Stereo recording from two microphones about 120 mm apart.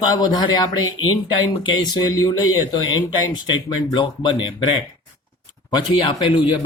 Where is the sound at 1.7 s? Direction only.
35° left (ahead or behind).